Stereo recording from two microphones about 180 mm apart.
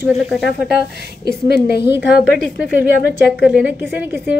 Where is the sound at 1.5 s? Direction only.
65° left (ahead or behind).